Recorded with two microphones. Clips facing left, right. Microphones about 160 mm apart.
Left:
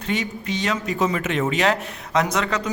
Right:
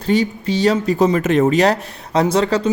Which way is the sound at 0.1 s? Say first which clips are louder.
Right 8 dB; 35° right (ahead or behind).